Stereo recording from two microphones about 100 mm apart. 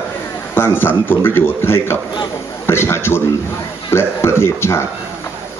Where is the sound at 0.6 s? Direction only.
20° left (ahead or behind).